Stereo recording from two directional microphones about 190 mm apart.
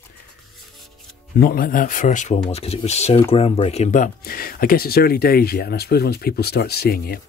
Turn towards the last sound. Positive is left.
turn(degrees=50)  # may be behind; listen again after turning